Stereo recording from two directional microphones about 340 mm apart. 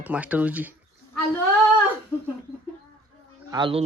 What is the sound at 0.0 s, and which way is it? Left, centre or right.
Speech, centre.